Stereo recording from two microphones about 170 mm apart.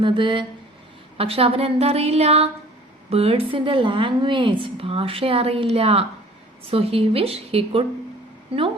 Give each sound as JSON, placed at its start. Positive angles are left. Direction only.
{"t": 0.0, "sound": "a woman's voice", "side_deg": -30}